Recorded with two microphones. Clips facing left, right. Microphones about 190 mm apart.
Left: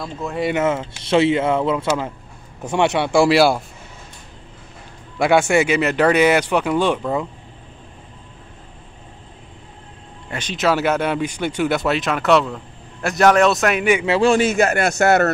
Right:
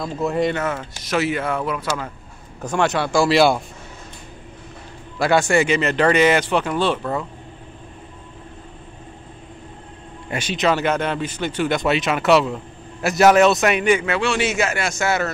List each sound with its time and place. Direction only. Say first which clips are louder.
0.0 s speech: right 3 dB; centre (ahead or behind)
0.6 s speech: left 5 dB; 25° left (ahead or behind)
3.3 s speech: left 1 dB; 5° left (ahead or behind)
5.2 s speech: left 2 dB; 10° left (ahead or behind)
10.5 s speech: left 1 dB; 5° left (ahead or behind)
14.0 s a man's voice: left 6 dB; 30° left (ahead or behind)
14.6 s a man's voice: left 5 dB; 60° left (ahead or behind)